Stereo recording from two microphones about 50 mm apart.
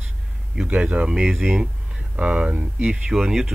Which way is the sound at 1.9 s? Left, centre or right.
Right.